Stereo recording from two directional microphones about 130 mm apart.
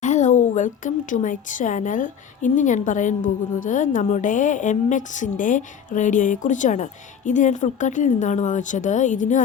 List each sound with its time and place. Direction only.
0.0 s a woman's voice: 65° left (ahead or behind)